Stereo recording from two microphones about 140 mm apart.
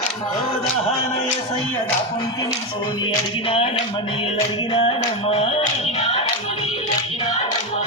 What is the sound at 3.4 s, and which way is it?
Speech, 45° left (ahead or behind).